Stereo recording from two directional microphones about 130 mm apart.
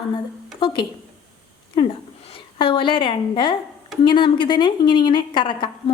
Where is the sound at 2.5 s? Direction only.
40° left (ahead or behind).